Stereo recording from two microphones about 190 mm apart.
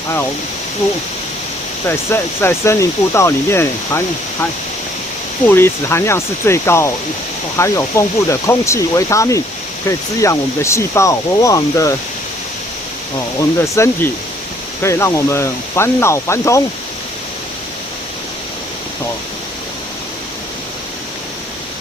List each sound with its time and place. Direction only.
1.9 s speech: 10° left (ahead or behind)
5.5 s speech: 10° left (ahead or behind)
13.6 s speech: 15° left (ahead or behind)